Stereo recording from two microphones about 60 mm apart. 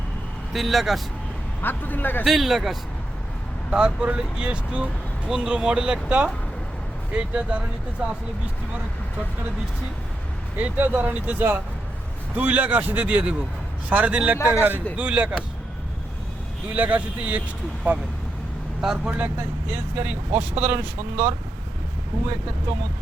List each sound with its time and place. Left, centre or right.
0.5 s speech: centre
1.6 s a man's voice: left
2.2 s speech: centre
3.7 s speech: centre
10.6 s speech: right
14.3 s a man's voice: left
14.9 s speech: right
16.7 s speech: right
18.8 s speech: centre
19.1 s speech: right